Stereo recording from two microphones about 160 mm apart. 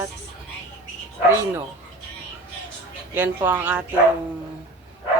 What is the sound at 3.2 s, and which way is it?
Speech, 10° right (ahead or behind).